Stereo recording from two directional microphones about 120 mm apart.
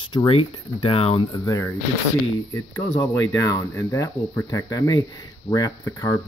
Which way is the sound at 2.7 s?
25° left (ahead or behind).